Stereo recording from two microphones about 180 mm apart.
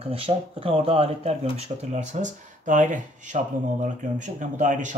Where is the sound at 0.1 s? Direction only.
30° right (ahead or behind).